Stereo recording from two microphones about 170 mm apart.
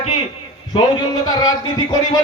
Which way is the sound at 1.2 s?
25° left (ahead or behind).